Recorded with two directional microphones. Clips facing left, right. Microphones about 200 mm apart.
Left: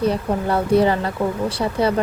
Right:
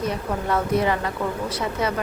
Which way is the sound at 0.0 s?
30° left (ahead or behind).